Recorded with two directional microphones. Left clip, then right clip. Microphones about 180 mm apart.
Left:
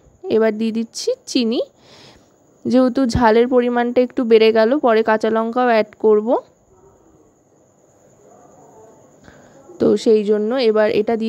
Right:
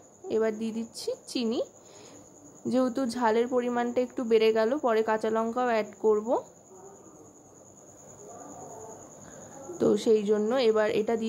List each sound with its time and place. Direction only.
0.3 s speech: 45° left (ahead or behind)
9.8 s speech: 35° left (ahead or behind)